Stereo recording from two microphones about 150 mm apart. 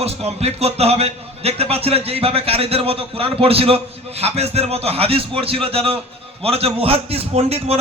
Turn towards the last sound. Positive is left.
turn(degrees=-45)  # may be behind; listen again after turning